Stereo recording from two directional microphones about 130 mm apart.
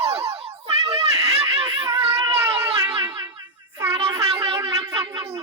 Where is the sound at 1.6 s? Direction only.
25° right (ahead or behind).